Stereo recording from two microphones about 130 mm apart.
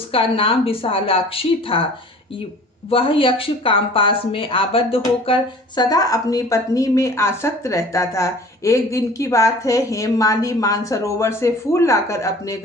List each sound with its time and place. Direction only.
0.1 s a woman's voice: 45° left (ahead or behind)
2.9 s speech: 45° left (ahead or behind); by 12.5 s 25° left (ahead or behind)